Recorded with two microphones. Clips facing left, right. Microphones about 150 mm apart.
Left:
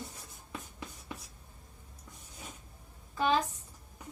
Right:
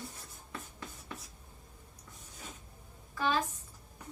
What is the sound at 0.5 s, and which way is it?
Writing, 15° left (ahead or behind).